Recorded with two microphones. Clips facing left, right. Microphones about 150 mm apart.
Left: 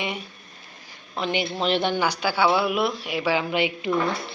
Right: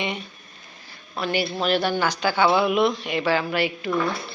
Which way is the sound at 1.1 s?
20° left (ahead or behind).